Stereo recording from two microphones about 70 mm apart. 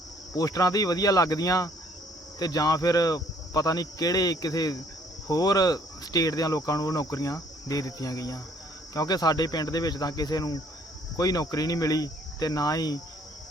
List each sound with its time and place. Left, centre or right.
0.3 s cricket: left
9.0 s speech: left
11.2 s cricket: left